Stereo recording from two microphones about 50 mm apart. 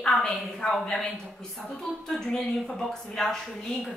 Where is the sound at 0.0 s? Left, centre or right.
Centre.